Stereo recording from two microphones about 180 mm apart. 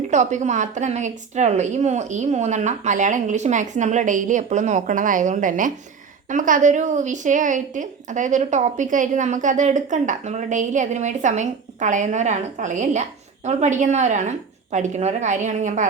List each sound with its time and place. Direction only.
0.1 s a woman's voice: 40° right (ahead or behind)